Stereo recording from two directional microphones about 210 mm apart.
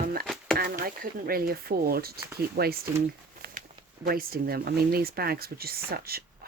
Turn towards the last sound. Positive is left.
turn(degrees=-45)  # may be behind; listen again after turning